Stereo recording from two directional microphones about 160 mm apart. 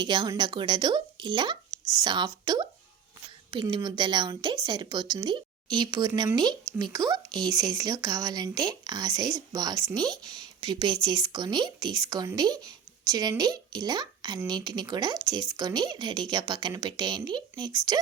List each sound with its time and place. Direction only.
0.0 s speech: 30° right (ahead or behind)